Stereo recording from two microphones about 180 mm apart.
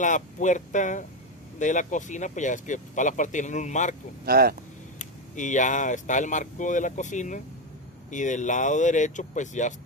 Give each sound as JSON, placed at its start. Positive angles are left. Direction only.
{"t": 0.0, "sound": "speech", "side_deg": 45}
{"t": 4.3, "sound": "speech", "side_deg": -60}
{"t": 4.9, "sound": "speech", "side_deg": 45}